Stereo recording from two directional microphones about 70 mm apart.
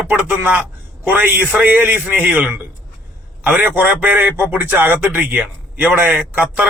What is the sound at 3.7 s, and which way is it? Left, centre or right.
A man's voice, right.